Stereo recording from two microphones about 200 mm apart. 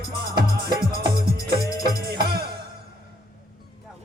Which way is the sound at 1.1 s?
50° right (ahead or behind).